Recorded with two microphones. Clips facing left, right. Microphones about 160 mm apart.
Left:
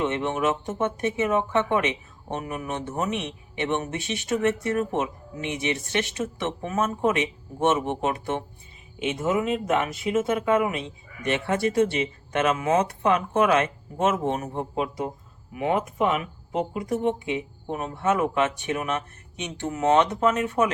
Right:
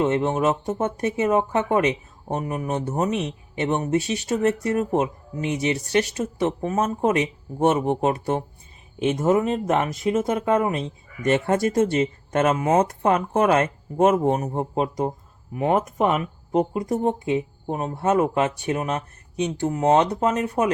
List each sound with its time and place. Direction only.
0.0 s speech: 35° right (ahead or behind)